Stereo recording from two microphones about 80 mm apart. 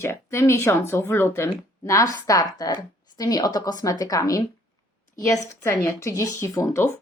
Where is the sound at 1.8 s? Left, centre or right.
Left.